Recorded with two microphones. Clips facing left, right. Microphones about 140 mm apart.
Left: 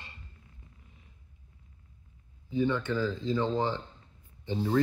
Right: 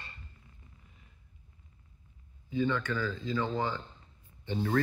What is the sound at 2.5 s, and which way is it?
Speech, 20° left (ahead or behind).